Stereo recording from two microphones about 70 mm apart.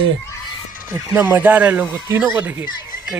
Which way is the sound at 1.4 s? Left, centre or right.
Right.